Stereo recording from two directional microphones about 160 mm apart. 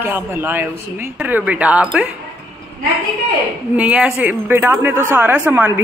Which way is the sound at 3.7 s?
10° right (ahead or behind).